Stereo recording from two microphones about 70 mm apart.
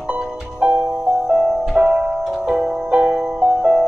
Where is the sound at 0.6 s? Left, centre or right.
Centre.